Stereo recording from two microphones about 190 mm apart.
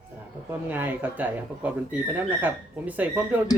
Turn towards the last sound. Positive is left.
turn(degrees=-10)  # may be behind; listen again after turning